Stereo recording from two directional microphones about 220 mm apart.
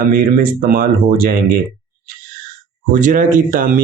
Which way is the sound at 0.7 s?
40° right (ahead or behind).